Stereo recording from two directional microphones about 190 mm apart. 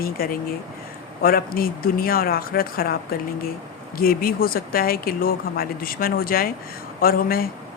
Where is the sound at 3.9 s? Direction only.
50° left (ahead or behind).